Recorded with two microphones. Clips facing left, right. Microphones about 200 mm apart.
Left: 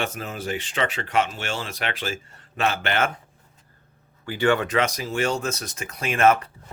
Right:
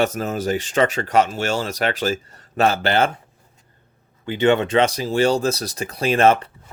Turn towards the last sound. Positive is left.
turn(degrees=-30)  # may be behind; listen again after turning